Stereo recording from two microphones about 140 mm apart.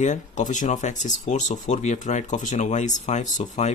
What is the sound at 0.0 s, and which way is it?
Speech, 60° left (ahead or behind).